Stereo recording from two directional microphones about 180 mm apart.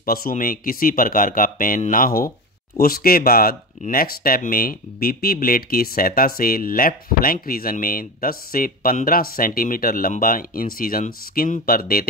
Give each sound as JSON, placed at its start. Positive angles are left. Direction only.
{"t": 0.0, "sound": "speech", "side_deg": 55}